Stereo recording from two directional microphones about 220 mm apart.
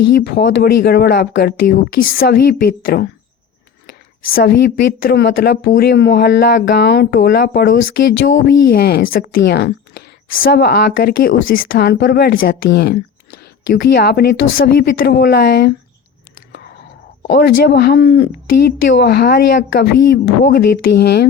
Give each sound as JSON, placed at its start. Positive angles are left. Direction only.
{"t": 0.2, "sound": "speech", "side_deg": 45}
{"t": 17.2, "sound": "speech", "side_deg": 50}